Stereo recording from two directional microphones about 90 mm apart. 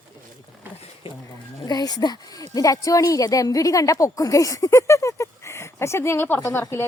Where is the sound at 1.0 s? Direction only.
85° left.